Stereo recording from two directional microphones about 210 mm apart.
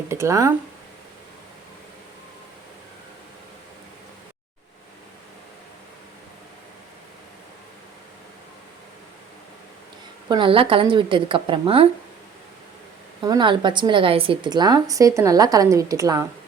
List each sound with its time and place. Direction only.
0.1 s a woman's voice: 15° right (ahead or behind)
10.2 s a woman's voice: 25° right (ahead or behind)
13.2 s a woman's voice: 20° right (ahead or behind)